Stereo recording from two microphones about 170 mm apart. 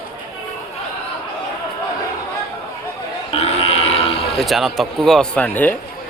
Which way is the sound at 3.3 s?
35° left (ahead or behind).